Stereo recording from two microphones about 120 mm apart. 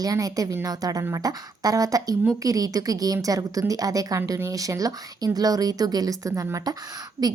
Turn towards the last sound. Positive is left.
turn(degrees=-30)  # may be behind; listen again after turning